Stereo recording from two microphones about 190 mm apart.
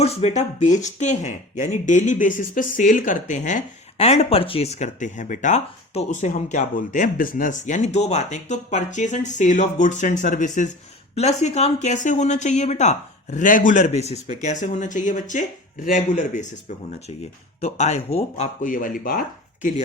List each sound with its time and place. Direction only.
0.0 s speech: 35° left (ahead or behind)